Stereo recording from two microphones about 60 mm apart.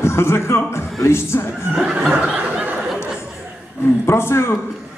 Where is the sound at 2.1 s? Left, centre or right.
Right.